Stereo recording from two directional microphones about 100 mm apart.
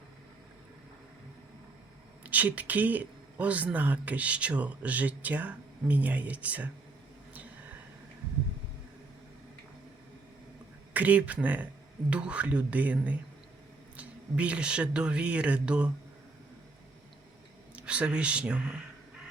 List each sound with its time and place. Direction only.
2.2 s speech: 15° right (ahead or behind)
10.9 s speech: 15° right (ahead or behind)
17.7 s speech: 10° right (ahead or behind)